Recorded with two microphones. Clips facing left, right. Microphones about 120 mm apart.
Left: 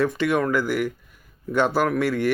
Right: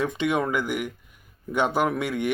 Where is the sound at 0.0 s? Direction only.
20° right (ahead or behind).